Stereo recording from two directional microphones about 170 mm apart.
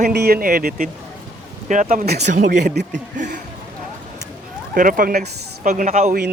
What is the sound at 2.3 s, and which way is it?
Speech, 50° right (ahead or behind).